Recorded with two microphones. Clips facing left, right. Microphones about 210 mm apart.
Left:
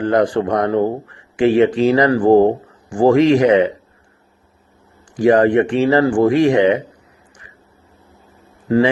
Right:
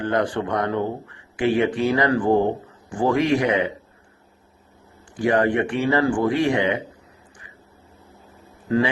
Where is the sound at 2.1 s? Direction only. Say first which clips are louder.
Left 8 dB; 85° left.